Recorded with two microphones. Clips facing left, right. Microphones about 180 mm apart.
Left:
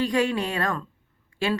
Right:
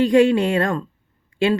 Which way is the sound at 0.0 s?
25° right (ahead or behind).